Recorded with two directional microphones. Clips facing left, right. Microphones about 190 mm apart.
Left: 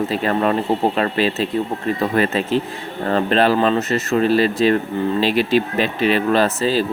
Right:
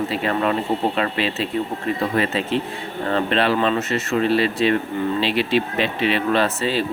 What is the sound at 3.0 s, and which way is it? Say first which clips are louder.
Speech: left 4 dB; 40° left (ahead or behind).